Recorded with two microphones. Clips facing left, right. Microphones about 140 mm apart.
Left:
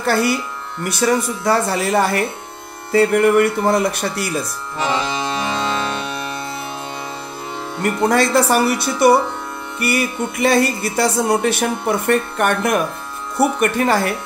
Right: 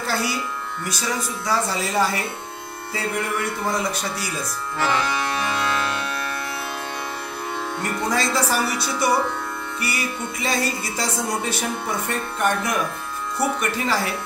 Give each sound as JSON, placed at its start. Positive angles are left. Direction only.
{"t": 0.0, "sound": "music", "side_deg": 60}
{"t": 4.7, "sound": "accordion", "side_deg": 20}
{"t": 7.8, "sound": "music", "side_deg": 60}